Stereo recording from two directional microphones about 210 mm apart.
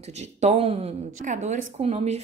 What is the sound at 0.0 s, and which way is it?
A woman's voice, 30° right (ahead or behind).